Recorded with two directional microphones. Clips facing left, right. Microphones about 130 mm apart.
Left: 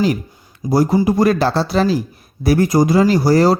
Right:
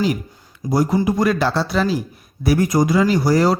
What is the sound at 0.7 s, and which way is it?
Speech, 35° left (ahead or behind).